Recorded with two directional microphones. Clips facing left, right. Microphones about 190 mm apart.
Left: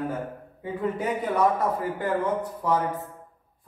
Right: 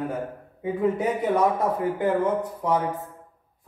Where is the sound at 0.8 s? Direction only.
25° right (ahead or behind).